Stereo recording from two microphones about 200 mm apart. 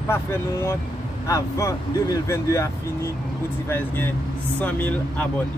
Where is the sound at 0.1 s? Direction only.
10° left (ahead or behind).